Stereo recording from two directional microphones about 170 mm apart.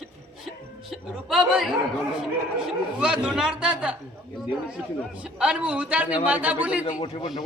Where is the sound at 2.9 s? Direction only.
5° right (ahead or behind).